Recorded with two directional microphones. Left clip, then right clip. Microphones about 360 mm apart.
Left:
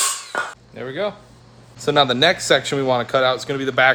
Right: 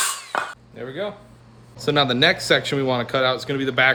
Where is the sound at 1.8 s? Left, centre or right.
Centre.